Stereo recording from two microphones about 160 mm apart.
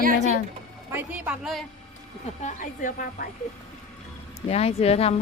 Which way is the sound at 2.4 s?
55° left (ahead or behind).